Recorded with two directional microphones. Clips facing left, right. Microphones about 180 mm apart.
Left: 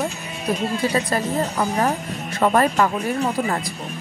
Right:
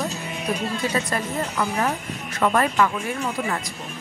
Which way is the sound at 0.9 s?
35° left (ahead or behind).